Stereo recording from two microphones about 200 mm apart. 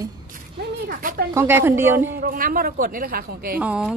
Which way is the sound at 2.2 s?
45° right (ahead or behind).